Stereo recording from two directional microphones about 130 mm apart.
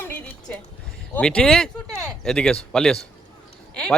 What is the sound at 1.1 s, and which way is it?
Speech, 10° left (ahead or behind).